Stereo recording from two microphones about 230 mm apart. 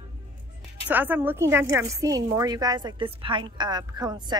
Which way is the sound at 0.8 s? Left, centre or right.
Centre.